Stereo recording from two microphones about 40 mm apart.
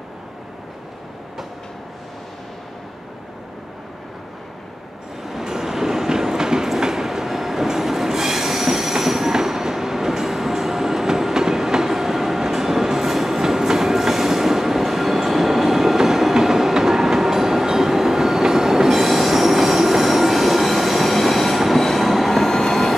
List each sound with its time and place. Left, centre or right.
5.2 s train: centre